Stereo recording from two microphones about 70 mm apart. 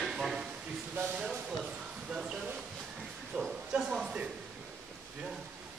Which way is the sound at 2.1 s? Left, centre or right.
Centre.